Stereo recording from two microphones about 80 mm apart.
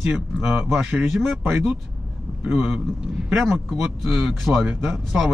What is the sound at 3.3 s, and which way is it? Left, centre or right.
Speech, centre.